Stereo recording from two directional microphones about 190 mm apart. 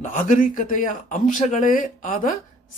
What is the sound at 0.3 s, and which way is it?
Speech, 40° left (ahead or behind).